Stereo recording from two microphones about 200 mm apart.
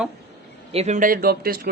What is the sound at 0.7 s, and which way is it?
Speech, 35° right (ahead or behind).